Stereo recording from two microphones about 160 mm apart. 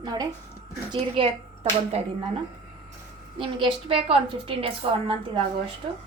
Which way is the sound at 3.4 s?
30° right (ahead or behind).